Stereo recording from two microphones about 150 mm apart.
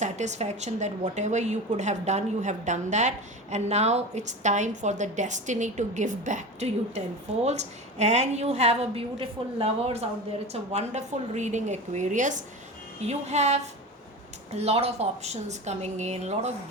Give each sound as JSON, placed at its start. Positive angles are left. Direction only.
{"t": 0.0, "sound": "a woman's voice", "side_deg": -50}